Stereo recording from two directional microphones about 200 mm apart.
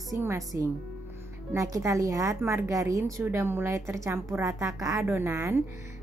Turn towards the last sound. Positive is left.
turn(degrees=-15)  # may be behind; listen again after turning